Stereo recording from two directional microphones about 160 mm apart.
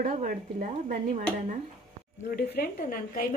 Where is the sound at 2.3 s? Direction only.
85° left; by 3.4 s 65° left (ahead or behind).